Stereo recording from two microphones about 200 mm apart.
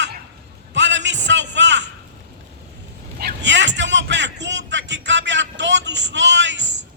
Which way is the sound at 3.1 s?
55° right (ahead or behind).